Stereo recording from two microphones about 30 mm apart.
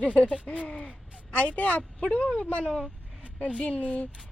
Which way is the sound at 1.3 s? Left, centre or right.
Left.